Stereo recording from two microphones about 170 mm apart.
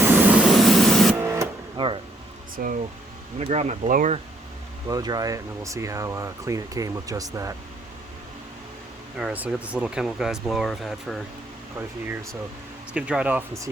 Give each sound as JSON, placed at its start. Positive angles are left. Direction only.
{"t": 0.0, "sound": "spray", "side_deg": -10}
{"t": 1.2, "sound": "printer", "side_deg": -15}
{"t": 2.6, "sound": "speech", "side_deg": -55}
{"t": 3.3, "sound": "speech", "side_deg": -40}
{"t": 4.9, "sound": "speech", "side_deg": -20}
{"t": 9.1, "sound": "speech", "side_deg": -5}
{"t": 11.8, "sound": "speech", "side_deg": -10}